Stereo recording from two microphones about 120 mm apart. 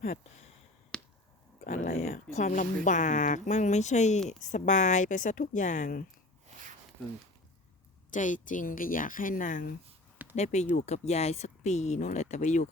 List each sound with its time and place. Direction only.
0.9 s a sound: 5° left (ahead or behind)
1.6 s speech: 85° left
4.3 s speech: 90° left
8.1 s speech: 90° left
10.3 s speech: 70° left (ahead or behind)